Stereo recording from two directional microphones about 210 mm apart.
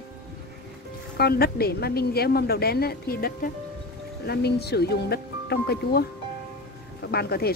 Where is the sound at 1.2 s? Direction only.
50° left (ahead or behind).